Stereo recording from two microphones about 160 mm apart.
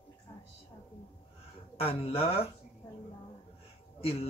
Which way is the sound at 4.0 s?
40° left (ahead or behind).